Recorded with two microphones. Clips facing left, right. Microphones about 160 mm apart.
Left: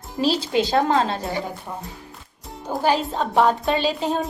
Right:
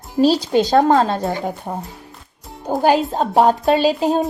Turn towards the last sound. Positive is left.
turn(degrees=-40)  # may be behind; listen again after turning